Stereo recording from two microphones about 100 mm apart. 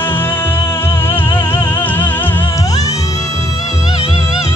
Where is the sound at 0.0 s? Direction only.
20° left (ahead or behind).